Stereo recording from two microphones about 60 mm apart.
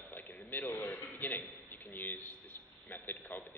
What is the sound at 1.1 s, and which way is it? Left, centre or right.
A man's voice, left.